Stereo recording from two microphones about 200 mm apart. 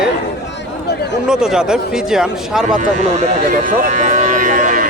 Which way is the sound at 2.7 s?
35° right (ahead or behind).